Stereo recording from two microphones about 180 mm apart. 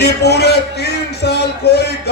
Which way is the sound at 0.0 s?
65° left (ahead or behind).